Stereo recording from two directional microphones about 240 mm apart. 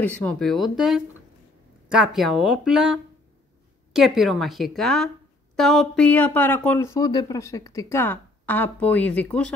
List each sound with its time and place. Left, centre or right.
0.0 s a woman's voice: centre